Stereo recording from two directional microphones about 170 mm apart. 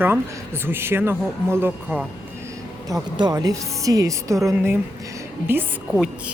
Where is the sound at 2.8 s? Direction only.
20° right (ahead or behind).